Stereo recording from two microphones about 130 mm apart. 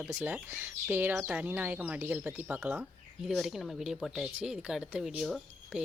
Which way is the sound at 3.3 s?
Centre (ahead or behind).